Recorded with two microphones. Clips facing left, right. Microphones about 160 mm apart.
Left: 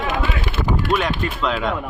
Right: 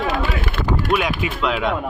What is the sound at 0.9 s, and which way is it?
Speech, 10° right (ahead or behind).